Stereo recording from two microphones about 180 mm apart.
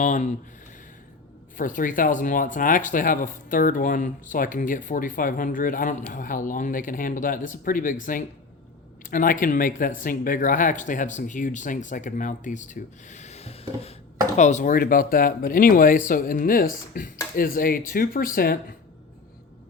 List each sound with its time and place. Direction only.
0.0 s speech: 40° left (ahead or behind)
1.5 s speech: 50° left (ahead or behind)
9.0 s speech: 50° left (ahead or behind)